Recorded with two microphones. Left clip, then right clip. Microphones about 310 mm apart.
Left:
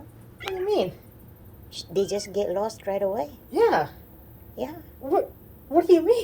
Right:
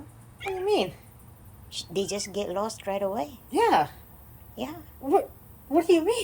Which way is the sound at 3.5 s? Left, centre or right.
Right.